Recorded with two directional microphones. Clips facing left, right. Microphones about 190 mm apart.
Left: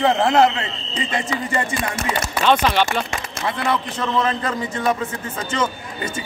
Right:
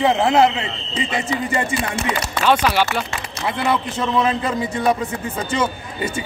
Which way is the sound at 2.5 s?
10° right (ahead or behind).